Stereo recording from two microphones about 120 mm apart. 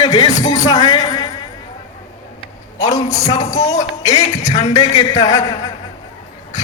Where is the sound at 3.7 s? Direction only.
30° left (ahead or behind).